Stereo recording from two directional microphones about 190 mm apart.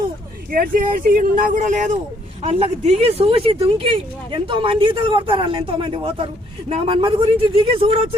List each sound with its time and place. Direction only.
0.5 s speech: 45° right (ahead or behind); by 7.9 s 30° right (ahead or behind)